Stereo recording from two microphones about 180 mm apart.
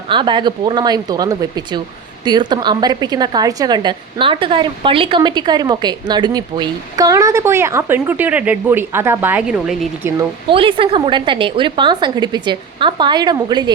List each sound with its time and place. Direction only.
0.1 s a woman's voice: 25° right (ahead or behind); by 10.1 s 5° right (ahead or behind)
10.5 s a woman's voice: 30° right (ahead or behind)